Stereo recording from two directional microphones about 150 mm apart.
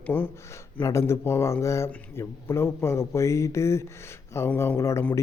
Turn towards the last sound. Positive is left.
turn(degrees=20)  # may be behind; listen again after turning